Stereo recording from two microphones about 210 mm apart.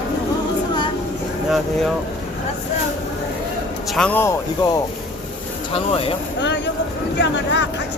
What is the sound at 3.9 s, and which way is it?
Speech, 5° left (ahead or behind).